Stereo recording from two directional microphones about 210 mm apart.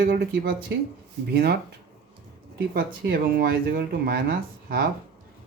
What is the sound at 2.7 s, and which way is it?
Speech, 45° right (ahead or behind).